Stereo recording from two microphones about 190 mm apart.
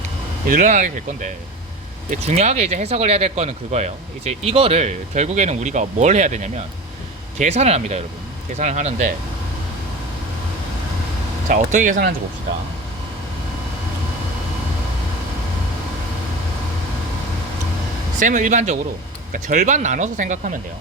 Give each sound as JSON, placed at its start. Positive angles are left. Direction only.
{"t": 0.4, "sound": "speech", "side_deg": -45}
{"t": 11.4, "sound": "speech", "side_deg": -40}
{"t": 18.2, "sound": "speech", "side_deg": -40}